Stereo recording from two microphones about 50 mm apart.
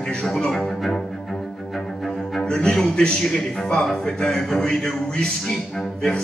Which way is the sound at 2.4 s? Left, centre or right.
Centre.